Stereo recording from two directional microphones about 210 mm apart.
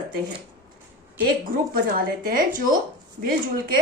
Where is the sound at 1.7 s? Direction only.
45° right (ahead or behind).